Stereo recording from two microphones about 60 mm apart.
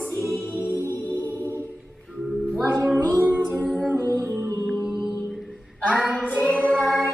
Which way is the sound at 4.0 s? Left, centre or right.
Right.